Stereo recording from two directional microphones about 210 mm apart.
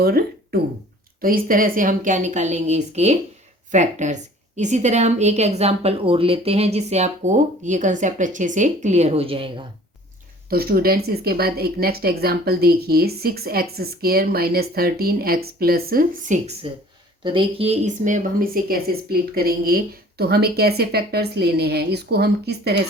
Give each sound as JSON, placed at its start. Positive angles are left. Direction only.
{"t": 0.0, "sound": "a woman's voice", "side_deg": -45}
{"t": 10.5, "sound": "speech", "side_deg": -45}
{"t": 17.2, "sound": "speech", "side_deg": -25}